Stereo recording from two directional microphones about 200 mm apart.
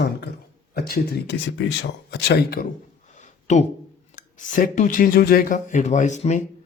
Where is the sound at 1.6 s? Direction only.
65° left (ahead or behind).